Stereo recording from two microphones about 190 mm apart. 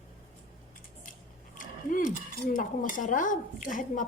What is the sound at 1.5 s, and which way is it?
Dishes, 45° left (ahead or behind).